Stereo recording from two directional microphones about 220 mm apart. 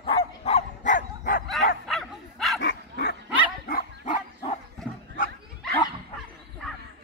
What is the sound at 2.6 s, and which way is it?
Dog, 50° left (ahead or behind).